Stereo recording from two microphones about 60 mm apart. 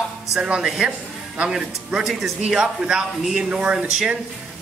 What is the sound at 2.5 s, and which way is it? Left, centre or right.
A man's voice, centre.